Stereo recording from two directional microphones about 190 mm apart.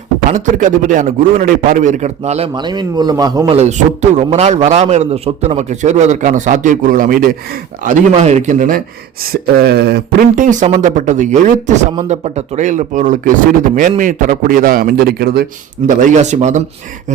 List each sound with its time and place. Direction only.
0.3 s a man's voice: 40° right (ahead or behind)
2.6 s a man's voice: 25° right (ahead or behind); by 7.3 s 45° right (ahead or behind)
7.9 s a man's voice: 35° right (ahead or behind)
9.3 s a man's voice: 55° right (ahead or behind)
15.9 s a man's voice: 40° right (ahead or behind)